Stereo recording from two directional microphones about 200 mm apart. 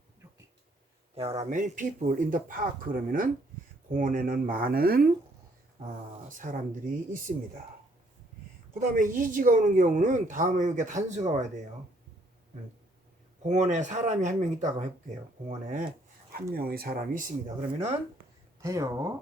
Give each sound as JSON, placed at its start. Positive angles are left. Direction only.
{"t": 1.1, "sound": "speech", "side_deg": -30}
{"t": 9.0, "sound": "speech", "side_deg": -40}
{"t": 13.4, "sound": "speech", "side_deg": -35}
{"t": 16.6, "sound": "speech", "side_deg": -50}
{"t": 18.6, "sound": "speech", "side_deg": -15}